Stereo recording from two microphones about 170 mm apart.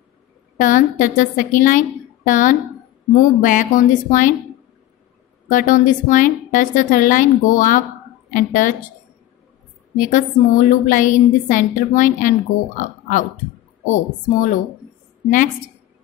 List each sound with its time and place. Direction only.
0.6 s a woman's voice: 50° left (ahead or behind)
5.5 s a woman's voice: 50° left (ahead or behind)
9.9 s a woman's voice: 50° left (ahead or behind)